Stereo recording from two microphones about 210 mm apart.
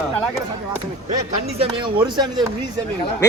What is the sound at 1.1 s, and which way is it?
A man's voice, 25° right (ahead or behind).